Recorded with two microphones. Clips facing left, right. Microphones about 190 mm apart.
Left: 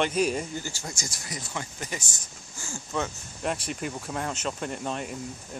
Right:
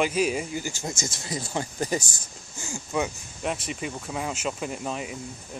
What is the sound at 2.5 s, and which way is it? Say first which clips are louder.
Speech: right 3 dB; 15° right (ahead or behind).